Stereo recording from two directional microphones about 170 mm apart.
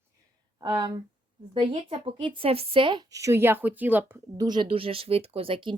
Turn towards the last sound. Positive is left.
turn(degrees=-30)  # may be behind; listen again after turning